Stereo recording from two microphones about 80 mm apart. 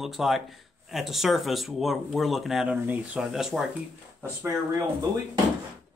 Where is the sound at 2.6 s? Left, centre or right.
Centre.